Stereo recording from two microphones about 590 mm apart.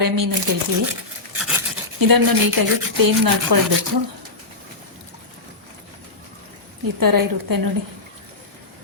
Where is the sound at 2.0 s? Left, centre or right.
Right.